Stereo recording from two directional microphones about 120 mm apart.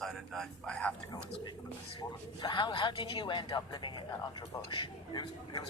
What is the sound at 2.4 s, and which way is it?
A woman's voice, 40° left (ahead or behind).